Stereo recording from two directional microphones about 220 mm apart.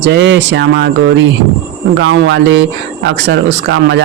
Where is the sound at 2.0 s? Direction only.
60° right (ahead or behind).